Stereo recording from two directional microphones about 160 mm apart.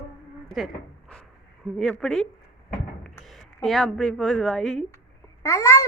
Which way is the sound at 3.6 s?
Centre (ahead or behind).